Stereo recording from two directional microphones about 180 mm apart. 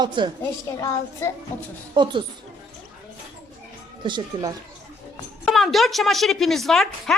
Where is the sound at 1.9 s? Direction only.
25° right (ahead or behind).